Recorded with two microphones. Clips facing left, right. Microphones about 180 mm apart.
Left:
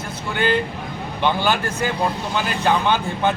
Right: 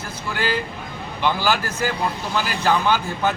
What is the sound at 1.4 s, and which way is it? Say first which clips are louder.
Speech: left 1 dB; 25° left (ahead or behind).